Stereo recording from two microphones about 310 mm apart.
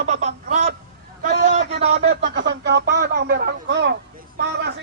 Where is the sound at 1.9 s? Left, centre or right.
Right.